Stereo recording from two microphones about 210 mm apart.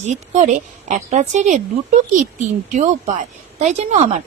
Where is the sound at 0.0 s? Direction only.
35° right (ahead or behind).